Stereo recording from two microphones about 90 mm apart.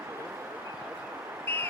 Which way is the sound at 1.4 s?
25° left (ahead or behind).